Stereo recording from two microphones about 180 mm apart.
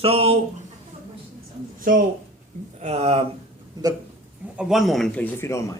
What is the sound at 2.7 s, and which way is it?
Speech, 35° right (ahead or behind).